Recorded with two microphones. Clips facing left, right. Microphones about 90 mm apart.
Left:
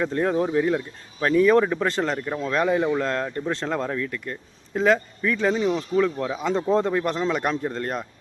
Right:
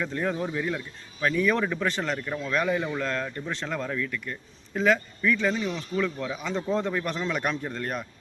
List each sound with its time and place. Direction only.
0.1 s a man's voice: 40° left (ahead or behind)
2.1 s a man's voice: 20° left (ahead or behind)
2.4 s a man's voice: 30° left (ahead or behind)
6.9 s a man's voice: 25° left (ahead or behind)